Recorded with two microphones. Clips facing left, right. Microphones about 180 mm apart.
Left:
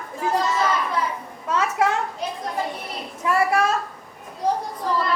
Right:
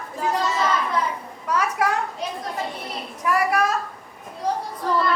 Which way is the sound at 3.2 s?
25° left (ahead or behind).